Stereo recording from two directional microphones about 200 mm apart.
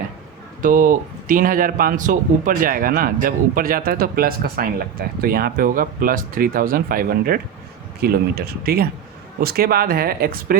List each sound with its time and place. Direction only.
0.6 s a man's voice: 40° right (ahead or behind)